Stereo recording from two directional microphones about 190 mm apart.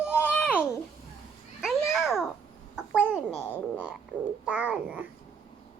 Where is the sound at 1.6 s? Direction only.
Centre (ahead or behind).